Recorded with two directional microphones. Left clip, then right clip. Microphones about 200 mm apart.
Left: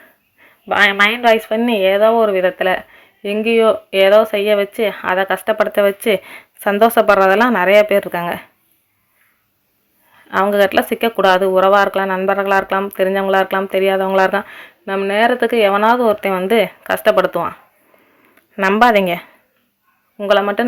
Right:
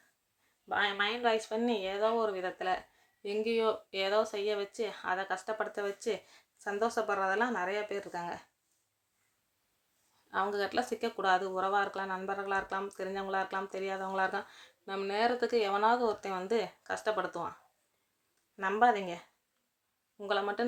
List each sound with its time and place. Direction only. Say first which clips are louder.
0.7 s speech: left 19 dB; 30° left (ahead or behind)
10.2 s speech: left 19 dB; 35° left (ahead or behind)
18.5 s speech: left 16 dB; 45° left (ahead or behind)
20.1 s speech: left 18 dB; 30° left (ahead or behind)